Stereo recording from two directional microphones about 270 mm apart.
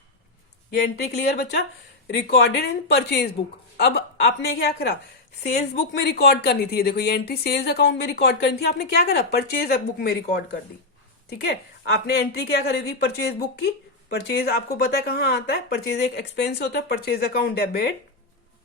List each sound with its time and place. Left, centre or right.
0.9 s speech: left
12.0 s speech: left